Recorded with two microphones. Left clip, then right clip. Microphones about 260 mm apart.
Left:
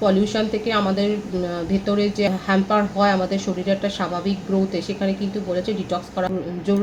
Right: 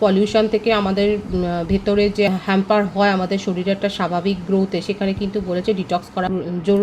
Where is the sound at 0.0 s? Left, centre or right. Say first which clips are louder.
Right 4 dB; right.